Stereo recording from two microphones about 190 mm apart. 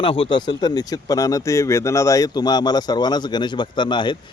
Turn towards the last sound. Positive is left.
turn(degrees=25)  # may be behind; listen again after turning